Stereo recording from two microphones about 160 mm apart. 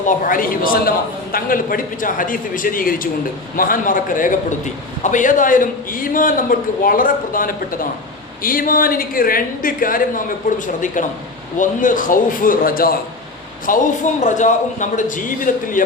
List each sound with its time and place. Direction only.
0.0 s a man's voice: 55° left (ahead or behind)
13.7 s a man's voice: 55° left (ahead or behind)